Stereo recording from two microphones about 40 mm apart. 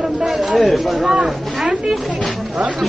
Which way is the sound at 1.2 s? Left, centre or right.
Right.